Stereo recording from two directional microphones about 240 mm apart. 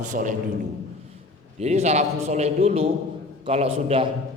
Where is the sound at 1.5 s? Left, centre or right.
Right.